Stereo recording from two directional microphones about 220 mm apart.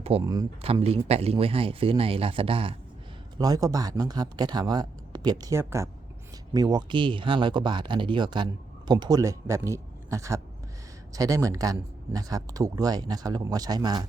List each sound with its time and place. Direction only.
0.0 s speech: 20° right (ahead or behind)